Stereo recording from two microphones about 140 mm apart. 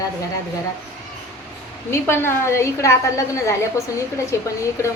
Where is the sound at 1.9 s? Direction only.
15° left (ahead or behind).